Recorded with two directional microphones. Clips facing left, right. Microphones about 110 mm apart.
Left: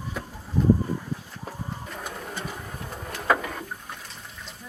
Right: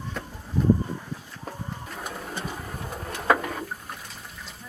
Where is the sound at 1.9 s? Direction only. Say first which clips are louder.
Right 1 dB; centre (ahead or behind).